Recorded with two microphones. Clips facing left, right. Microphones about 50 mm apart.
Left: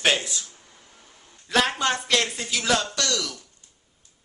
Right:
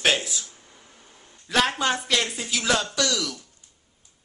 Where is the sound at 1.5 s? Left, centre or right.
Centre.